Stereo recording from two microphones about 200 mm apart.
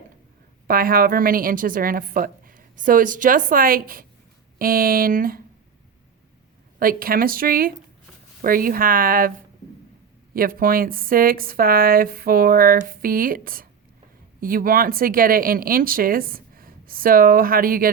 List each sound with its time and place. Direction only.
0.7 s speech: 45° right (ahead or behind)
6.7 s speech: 45° right (ahead or behind)
10.3 s speech: 45° right (ahead or behind)